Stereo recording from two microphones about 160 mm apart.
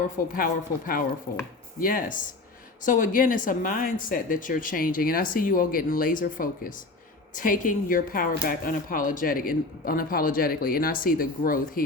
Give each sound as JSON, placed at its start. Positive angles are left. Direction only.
{"t": 0.3, "sound": "speech", "side_deg": 60}